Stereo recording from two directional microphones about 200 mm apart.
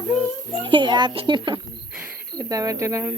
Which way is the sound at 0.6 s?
25° right (ahead or behind).